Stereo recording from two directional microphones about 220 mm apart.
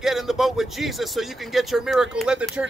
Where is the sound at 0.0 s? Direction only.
Centre (ahead or behind).